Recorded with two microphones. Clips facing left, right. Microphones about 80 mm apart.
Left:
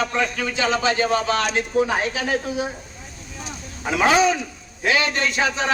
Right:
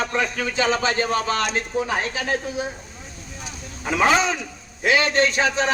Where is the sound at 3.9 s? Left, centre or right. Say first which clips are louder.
Left 2 dB; centre.